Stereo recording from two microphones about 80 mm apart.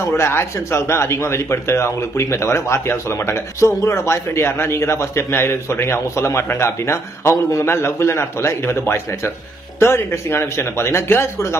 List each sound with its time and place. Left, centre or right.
0.0 s speech: left